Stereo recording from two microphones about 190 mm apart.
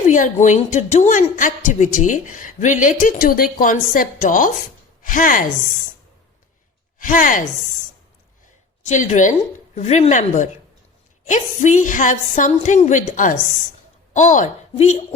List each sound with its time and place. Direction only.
0.1 s a woman's voice: 40° left (ahead or behind)
7.0 s a woman's voice: 45° left (ahead or behind)
8.8 s a woman's voice: 40° left (ahead or behind)